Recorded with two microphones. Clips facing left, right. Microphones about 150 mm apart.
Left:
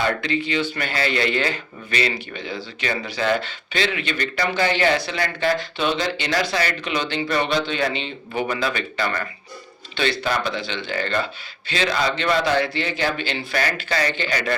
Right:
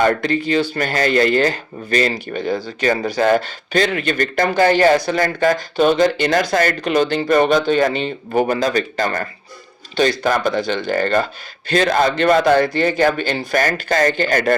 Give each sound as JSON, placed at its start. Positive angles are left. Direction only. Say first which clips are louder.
{"t": 0.0, "sound": "speech", "louder": "right 6 dB", "side_deg": -45}